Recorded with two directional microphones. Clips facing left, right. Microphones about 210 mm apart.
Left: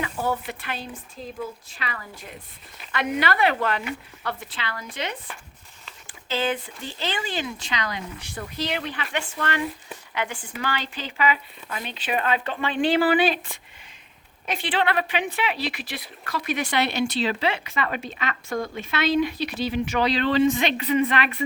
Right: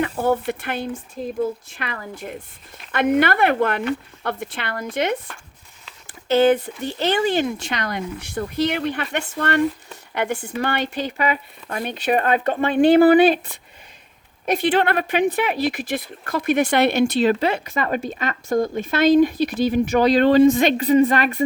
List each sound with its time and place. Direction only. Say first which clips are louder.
0.0 s speech: right 7 dB; 55° right (ahead or behind)
7.3 s speech: right 7 dB; 50° right (ahead or behind)
14.4 s speech: right 7 dB; 40° right (ahead or behind)